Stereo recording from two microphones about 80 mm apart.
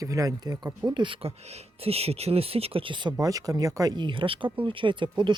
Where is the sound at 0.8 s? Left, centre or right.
Right.